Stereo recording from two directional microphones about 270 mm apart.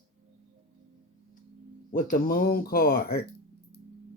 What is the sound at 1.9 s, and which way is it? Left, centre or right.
Speech, left.